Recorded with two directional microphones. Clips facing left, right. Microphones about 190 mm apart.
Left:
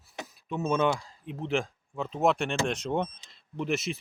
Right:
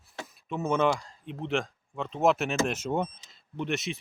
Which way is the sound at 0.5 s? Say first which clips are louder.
Right 1 dB; centre (ahead or behind).